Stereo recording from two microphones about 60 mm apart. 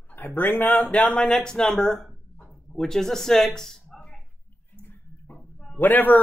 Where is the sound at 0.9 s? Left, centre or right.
Centre.